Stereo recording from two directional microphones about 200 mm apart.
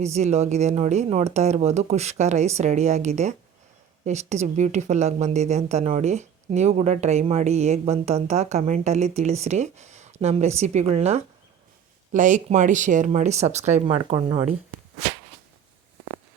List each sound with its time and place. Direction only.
0.0 s speech: 35° right (ahead or behind)